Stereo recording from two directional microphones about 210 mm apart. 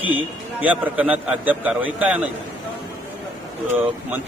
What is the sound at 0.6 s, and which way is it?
A man's voice, 5° right (ahead or behind).